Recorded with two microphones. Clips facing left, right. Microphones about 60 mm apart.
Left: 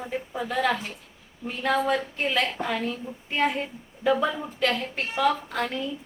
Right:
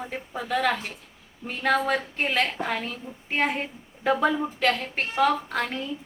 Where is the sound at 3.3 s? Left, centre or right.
Right.